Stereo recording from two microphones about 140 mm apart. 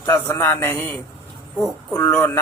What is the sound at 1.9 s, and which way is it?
Speech, 20° left (ahead or behind).